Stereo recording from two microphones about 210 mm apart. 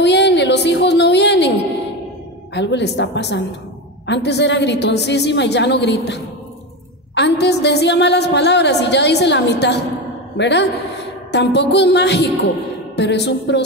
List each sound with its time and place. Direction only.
0.0 s a sound: 55° left (ahead or behind)
2.5 s a woman's voice: 55° left (ahead or behind)
7.2 s a woman's voice: 55° left (ahead or behind)
12.9 s music: 55° left (ahead or behind)